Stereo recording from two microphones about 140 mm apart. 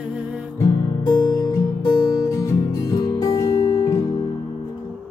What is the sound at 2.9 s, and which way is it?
Music, 25° left (ahead or behind).